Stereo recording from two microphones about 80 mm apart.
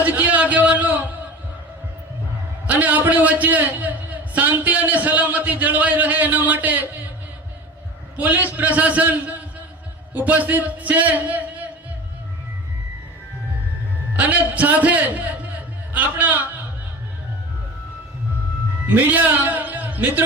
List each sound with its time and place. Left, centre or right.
0.0 s a sound: centre
2.6 s a man's voice: centre
8.1 s a man's voice: right
14.2 s a man's voice: centre
18.9 s a man's voice: right